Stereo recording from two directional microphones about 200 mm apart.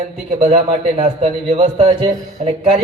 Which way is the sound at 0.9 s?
30° right (ahead or behind).